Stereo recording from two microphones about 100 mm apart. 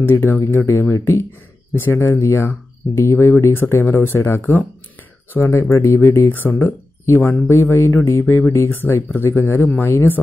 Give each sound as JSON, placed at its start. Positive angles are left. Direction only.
{"t": 0.0, "sound": "speech", "side_deg": 25}